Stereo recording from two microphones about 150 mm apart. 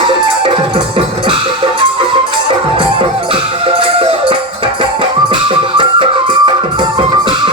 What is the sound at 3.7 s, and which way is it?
Music, 35° right (ahead or behind).